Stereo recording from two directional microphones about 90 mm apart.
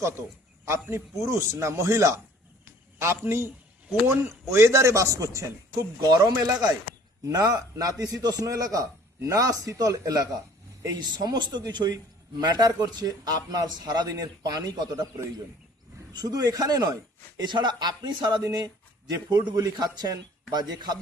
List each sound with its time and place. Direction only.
0.6 s a man's voice: 30° right (ahead or behind); by 15.0 s 50° right (ahead or behind)
16.1 s a man's voice: 45° right (ahead or behind)